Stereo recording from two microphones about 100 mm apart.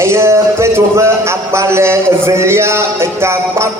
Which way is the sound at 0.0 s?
25° right (ahead or behind).